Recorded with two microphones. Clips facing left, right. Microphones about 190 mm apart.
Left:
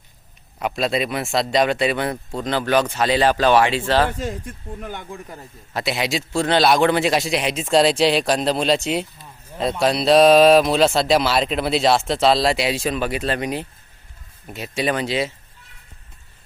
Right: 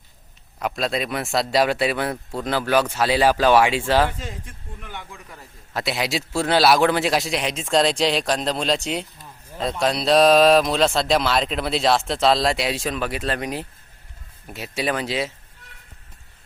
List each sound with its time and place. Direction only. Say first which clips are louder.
0.6 s a man's voice: left 3 dB; 5° left (ahead or behind)
4.2 s speech: left 8 dB; 50° left (ahead or behind)
5.7 s a man's voice: left 2 dB; centre (ahead or behind)